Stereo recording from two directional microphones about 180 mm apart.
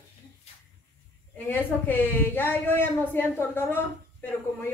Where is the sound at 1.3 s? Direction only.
10° left (ahead or behind).